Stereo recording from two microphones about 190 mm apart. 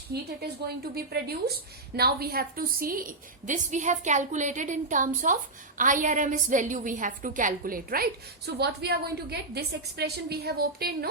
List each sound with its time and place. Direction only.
0.1 s a woman's voice: 60° right (ahead or behind)